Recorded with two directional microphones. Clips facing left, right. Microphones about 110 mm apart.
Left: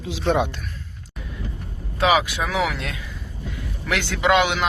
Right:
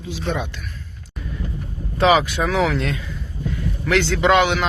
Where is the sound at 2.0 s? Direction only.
10° left (ahead or behind).